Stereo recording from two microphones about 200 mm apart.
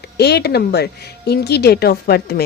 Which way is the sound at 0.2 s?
55° left (ahead or behind).